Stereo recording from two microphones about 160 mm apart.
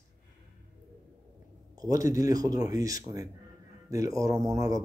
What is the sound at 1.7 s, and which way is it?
Speech, 20° right (ahead or behind).